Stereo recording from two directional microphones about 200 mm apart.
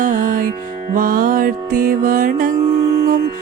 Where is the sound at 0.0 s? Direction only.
40° right (ahead or behind).